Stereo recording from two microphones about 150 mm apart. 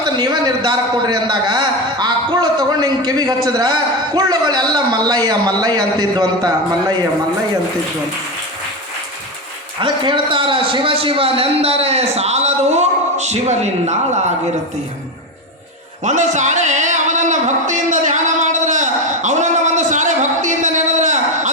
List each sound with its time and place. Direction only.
0.0 s a man's voice: 30° right (ahead or behind)
9.8 s a man's voice: 35° right (ahead or behind); by 13.9 s 50° right (ahead or behind)
16.0 s a sound: 55° right (ahead or behind)